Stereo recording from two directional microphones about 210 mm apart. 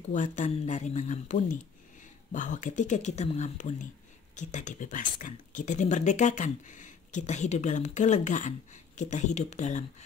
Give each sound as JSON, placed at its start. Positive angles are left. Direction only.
{"t": 0.1, "sound": "speech", "side_deg": 35}